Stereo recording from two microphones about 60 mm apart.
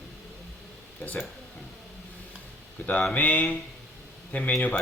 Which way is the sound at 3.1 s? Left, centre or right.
Left.